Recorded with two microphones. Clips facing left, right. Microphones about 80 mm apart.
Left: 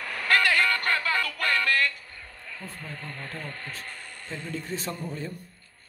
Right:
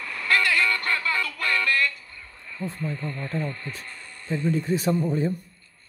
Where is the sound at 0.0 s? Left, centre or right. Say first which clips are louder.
Even; left.